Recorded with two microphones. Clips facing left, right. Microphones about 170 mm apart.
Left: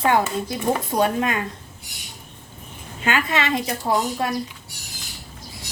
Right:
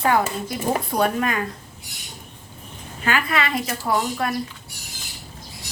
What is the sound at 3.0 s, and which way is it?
Speech, 25° left (ahead or behind).